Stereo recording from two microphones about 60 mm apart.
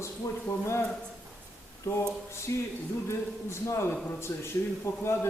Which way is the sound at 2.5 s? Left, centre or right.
Left.